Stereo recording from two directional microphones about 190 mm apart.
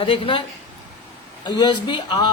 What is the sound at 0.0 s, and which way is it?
Speech, 25° left (ahead or behind).